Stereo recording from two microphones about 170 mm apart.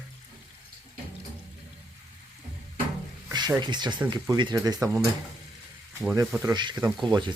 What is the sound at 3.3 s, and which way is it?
Speech, 25° right (ahead or behind).